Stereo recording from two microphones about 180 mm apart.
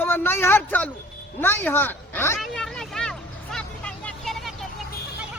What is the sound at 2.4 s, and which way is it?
Vehicle, centre (ahead or behind).